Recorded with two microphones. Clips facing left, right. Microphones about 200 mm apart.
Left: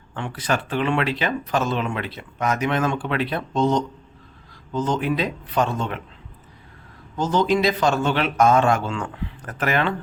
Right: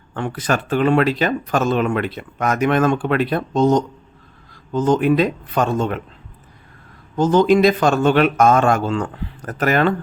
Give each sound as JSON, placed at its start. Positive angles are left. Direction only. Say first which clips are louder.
{"t": 0.1, "sound": "speech", "louder": "right 4 dB", "side_deg": -45}
{"t": 7.2, "sound": "speech", "louder": "right 7 dB", "side_deg": -50}